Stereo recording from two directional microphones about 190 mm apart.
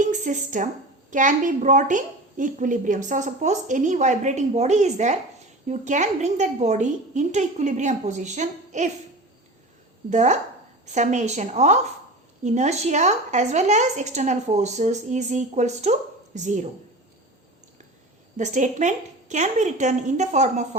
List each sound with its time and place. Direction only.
0.0 s a woman's voice: 40° right (ahead or behind)
10.1 s a woman's voice: 40° right (ahead or behind)
18.3 s a woman's voice: 40° right (ahead or behind)